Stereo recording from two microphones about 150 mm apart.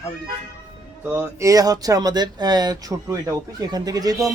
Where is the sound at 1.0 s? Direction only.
15° right (ahead or behind).